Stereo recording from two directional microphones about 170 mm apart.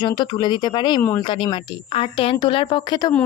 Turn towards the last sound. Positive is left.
turn(degrees=25)  # may be behind; listen again after turning